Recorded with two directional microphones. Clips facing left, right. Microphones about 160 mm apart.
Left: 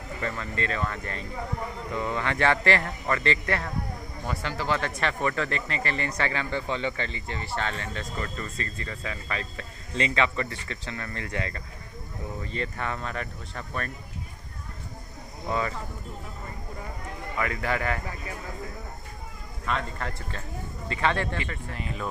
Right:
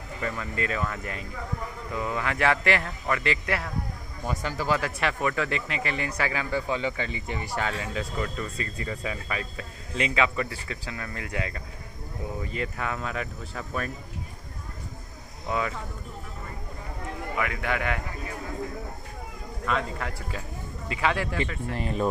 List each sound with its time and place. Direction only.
0.2 s speech: 10° right (ahead or behind)
15.5 s speech: 5° right (ahead or behind)
17.4 s speech: 5° right (ahead or behind)
19.6 s speech: centre (ahead or behind)
21.7 s speech: 40° right (ahead or behind)